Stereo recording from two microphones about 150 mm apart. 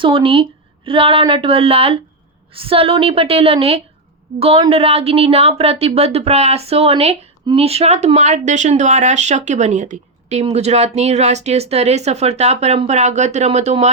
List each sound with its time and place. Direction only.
0.0 s a woman's voice: 35° right (ahead or behind)